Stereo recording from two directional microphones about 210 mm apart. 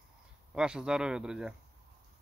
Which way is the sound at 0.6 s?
5° right (ahead or behind).